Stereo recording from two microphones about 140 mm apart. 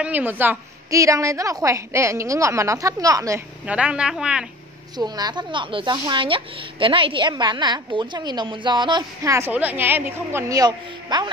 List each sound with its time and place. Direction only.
0.0 s a woman's voice: 10° right (ahead or behind)
3.6 s a woman's voice: 10° right (ahead or behind)
4.9 s speech: 30° right (ahead or behind)
9.2 s a woman's voice: 20° right (ahead or behind)
10.5 s a woman's voice: 30° right (ahead or behind)